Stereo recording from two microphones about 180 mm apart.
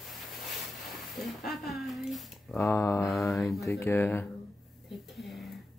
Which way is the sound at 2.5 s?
15° left (ahead or behind).